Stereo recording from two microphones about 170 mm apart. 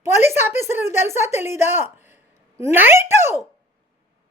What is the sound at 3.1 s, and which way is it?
Speech, 15° right (ahead or behind).